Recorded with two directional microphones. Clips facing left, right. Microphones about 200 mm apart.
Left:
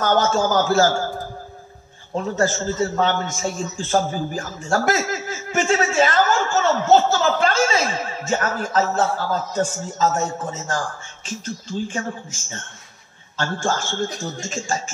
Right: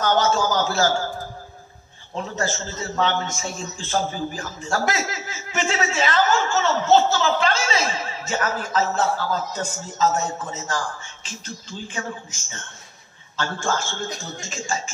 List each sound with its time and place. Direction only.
0.0 s a man's voice: 45° left (ahead or behind)
2.1 s a man's voice: 45° left (ahead or behind)